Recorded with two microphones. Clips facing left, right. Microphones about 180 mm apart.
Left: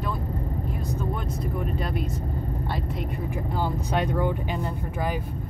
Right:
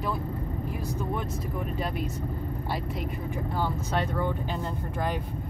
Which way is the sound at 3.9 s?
15° left (ahead or behind).